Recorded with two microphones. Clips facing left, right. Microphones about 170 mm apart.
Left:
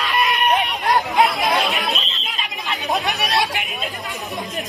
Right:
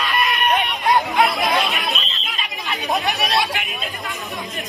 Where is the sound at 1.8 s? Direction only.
Centre (ahead or behind).